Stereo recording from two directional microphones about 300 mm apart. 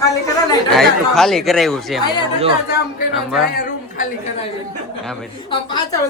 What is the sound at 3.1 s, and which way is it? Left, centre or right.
Speech, centre.